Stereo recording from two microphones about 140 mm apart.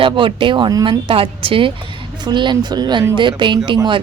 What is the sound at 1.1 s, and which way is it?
Speech, 40° right (ahead or behind).